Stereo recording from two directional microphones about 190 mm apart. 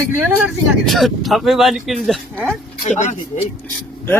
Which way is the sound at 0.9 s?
Centre (ahead or behind).